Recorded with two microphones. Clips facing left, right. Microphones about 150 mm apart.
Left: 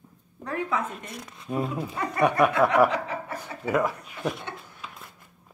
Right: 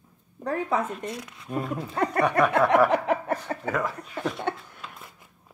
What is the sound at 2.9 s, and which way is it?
Chuckle, 60° right (ahead or behind).